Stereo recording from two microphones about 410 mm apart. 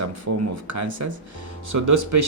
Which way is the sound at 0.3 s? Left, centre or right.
Right.